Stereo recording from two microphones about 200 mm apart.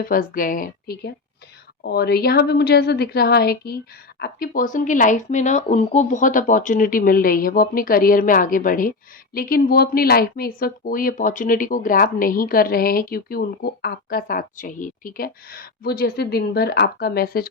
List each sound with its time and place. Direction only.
0.0 s speech: 45° left (ahead or behind)